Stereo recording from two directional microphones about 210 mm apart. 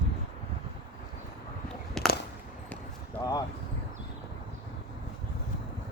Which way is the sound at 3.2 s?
15° left (ahead or behind).